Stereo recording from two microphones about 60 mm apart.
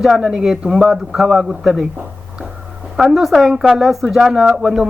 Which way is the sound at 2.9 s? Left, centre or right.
Centre.